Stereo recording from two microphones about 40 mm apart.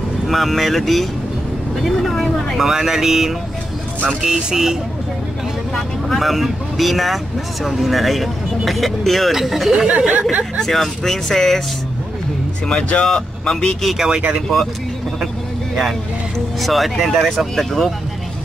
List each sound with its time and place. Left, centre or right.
0.3 s speech: centre
2.6 s speech: centre
5.8 s speech: centre
9.8 s speech: right
10.6 s speech: centre
12.6 s speech: left
13.9 s speech: centre
16.6 s speech: centre